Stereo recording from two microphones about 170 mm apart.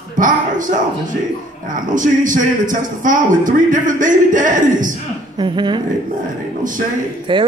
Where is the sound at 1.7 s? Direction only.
50° right (ahead or behind).